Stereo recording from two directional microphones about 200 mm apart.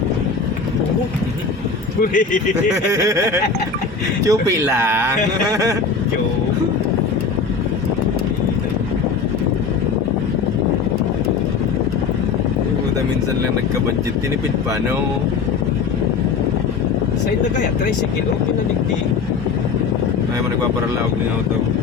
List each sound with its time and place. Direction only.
2.0 s speech: 40° left (ahead or behind)
2.9 s speech: 15° right (ahead or behind)